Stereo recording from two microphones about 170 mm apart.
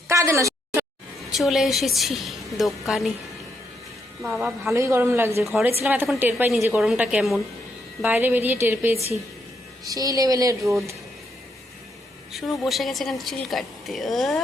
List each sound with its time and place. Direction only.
0.1 s a sound: 15° right (ahead or behind)
1.3 s speech: centre (ahead or behind)
4.2 s speech: 5° right (ahead or behind)
4.7 s speech: 15° right (ahead or behind)
5.4 s a woman's voice: centre (ahead or behind); by 10.8 s 20° right (ahead or behind)
12.3 s speech: centre (ahead or behind)